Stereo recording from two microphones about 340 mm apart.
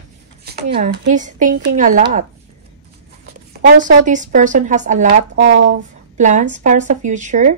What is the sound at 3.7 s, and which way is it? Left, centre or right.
Speech, right.